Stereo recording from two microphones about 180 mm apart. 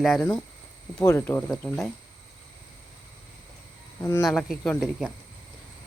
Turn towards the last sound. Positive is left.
turn(degrees=0)  # may be behind; listen again after turning